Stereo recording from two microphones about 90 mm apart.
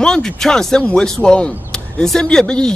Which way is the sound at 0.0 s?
5° left (ahead or behind).